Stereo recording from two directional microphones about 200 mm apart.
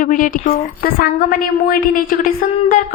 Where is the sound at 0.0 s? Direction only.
45° left (ahead or behind).